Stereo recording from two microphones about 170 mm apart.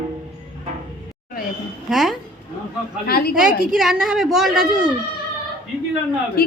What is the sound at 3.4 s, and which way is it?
A woman's voice, 5° right (ahead or behind).